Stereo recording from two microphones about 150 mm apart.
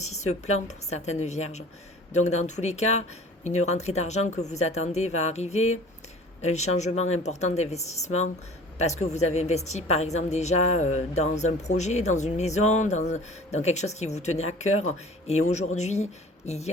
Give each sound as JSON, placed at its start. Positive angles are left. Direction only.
{"t": 0.0, "sound": "a woman's voice", "side_deg": 50}